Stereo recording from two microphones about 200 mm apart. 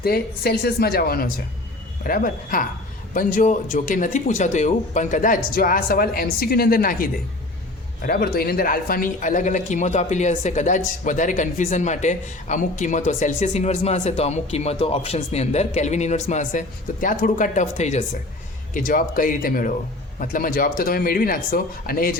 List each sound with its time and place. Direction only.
0.0 s speech: 50° left (ahead or behind)